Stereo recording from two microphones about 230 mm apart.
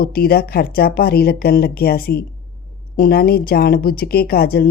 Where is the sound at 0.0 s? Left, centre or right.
Left.